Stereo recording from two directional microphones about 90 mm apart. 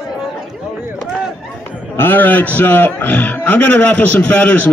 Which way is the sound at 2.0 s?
20° left (ahead or behind).